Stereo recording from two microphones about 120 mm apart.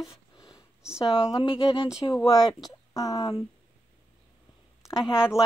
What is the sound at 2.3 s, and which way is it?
Speech, 35° left (ahead or behind).